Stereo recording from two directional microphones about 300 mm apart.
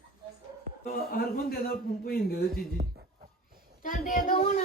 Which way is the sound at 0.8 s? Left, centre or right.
Left.